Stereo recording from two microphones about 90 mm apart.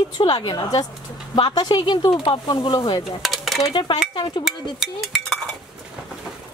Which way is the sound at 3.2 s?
Centre (ahead or behind).